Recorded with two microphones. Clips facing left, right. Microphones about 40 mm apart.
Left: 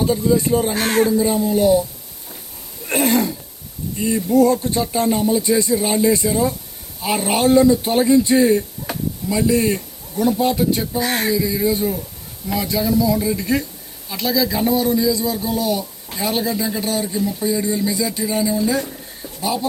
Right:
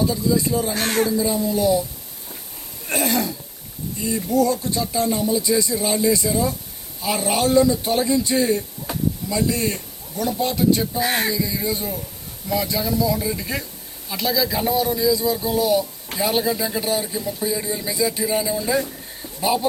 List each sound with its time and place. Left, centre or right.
0.0 s music: left
0.8 s a man's voice: centre
1.0 s speech: left
2.9 s a man's voice: left; by 11.0 s centre
11.0 s speech: centre
11.3 s a man's voice: centre